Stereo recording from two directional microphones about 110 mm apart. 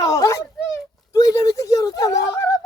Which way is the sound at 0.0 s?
35° left (ahead or behind).